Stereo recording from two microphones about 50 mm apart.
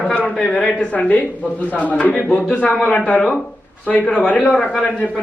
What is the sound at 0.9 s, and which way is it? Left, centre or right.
A man's voice, left.